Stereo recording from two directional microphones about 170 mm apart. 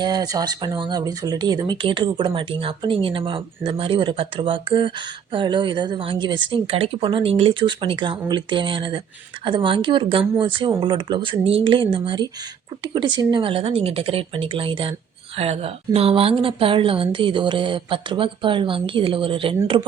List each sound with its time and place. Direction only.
0.0 s a woman's voice: 25° right (ahead or behind)